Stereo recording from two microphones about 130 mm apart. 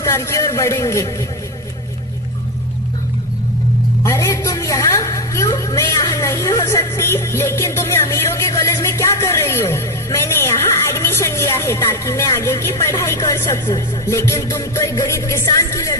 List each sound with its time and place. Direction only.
0.0 s a man's voice: 20° left (ahead or behind)
4.0 s a woman's voice: 20° left (ahead or behind)